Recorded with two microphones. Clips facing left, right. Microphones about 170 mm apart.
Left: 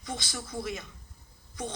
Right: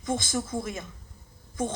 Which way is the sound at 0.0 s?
50° right (ahead or behind).